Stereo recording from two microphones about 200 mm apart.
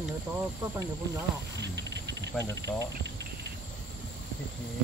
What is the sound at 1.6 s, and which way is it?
Cricket, 60° right (ahead or behind).